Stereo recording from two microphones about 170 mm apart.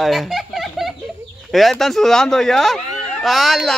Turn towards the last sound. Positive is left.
turn(degrees=0)  # may be behind; listen again after turning